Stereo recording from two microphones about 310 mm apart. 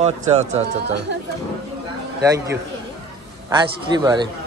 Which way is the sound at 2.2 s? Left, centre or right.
Centre.